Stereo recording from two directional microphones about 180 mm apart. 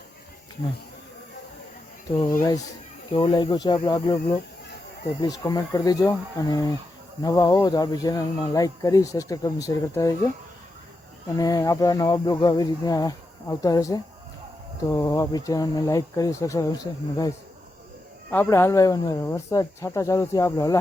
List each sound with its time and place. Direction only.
3.1 s speech: 25° left (ahead or behind)
5.4 s speech: 20° left (ahead or behind)
11.3 s speech: 20° left (ahead or behind)